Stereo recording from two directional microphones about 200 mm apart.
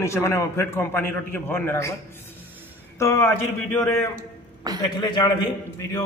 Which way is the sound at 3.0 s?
15° left (ahead or behind).